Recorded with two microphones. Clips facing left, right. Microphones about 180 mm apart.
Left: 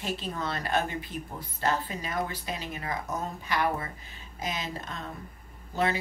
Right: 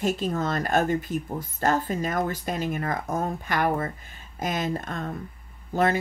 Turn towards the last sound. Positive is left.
turn(degrees=-50)  # may be behind; listen again after turning